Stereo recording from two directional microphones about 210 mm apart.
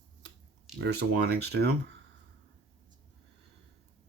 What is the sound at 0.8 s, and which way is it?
Speech, 50° right (ahead or behind).